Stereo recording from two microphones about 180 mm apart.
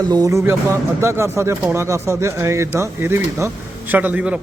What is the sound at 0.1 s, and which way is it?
Speech, 20° right (ahead or behind).